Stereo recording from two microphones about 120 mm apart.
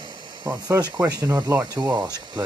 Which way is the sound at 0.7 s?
30° right (ahead or behind).